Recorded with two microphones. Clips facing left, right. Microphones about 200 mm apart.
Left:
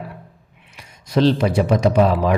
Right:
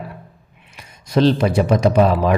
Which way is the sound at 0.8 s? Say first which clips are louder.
Right 1 dB; 45° right (ahead or behind).